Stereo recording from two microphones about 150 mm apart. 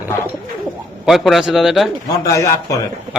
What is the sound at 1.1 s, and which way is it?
Speech, centre (ahead or behind).